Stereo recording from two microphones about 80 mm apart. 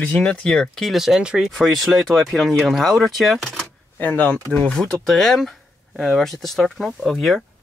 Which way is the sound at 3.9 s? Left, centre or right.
Left.